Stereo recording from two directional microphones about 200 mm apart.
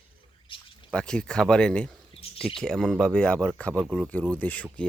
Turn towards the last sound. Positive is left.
turn(degrees=5)  # may be behind; listen again after turning